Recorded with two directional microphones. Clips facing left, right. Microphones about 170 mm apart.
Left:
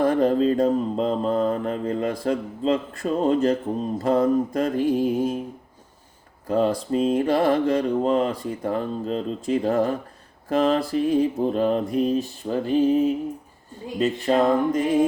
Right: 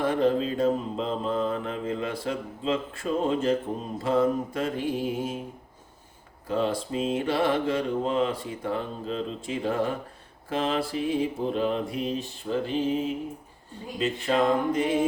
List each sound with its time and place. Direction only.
0.0 s mantra: 40° left (ahead or behind)
6.5 s mantra: 40° left (ahead or behind)